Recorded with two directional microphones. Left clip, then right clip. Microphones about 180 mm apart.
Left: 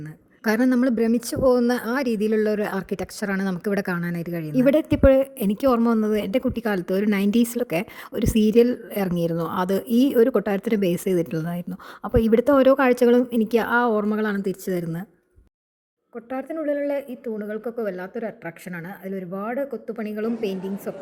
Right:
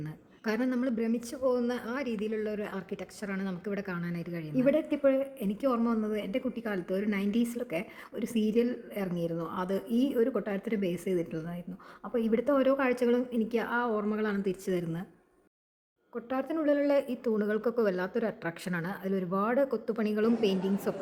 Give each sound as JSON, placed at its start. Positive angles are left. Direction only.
{"t": 0.4, "sound": "a woman's voice", "side_deg": 45}
{"t": 4.5, "sound": "a woman's voice", "side_deg": 60}
{"t": 16.1, "sound": "speech", "side_deg": 10}